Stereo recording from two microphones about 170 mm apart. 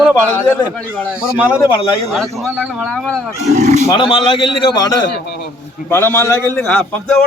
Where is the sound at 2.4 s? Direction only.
10° right (ahead or behind).